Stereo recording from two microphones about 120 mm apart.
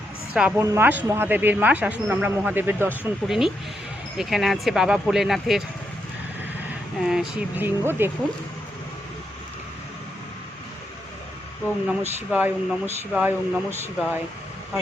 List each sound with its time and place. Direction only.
0.3 s speech: 10° right (ahead or behind)
0.6 s speech: 25° right (ahead or behind)
3.2 s speech: 5° right (ahead or behind)
7.0 s speech: 5° right (ahead or behind)
7.5 s speech: 15° right (ahead or behind)
12.3 s speech: 15° right (ahead or behind)